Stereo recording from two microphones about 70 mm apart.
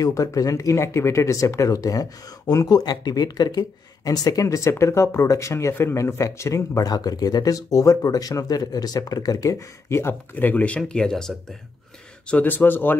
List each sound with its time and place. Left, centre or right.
0.0 s speech: left
9.8 s speech: left
10.8 s speech: centre
12.3 s speech: left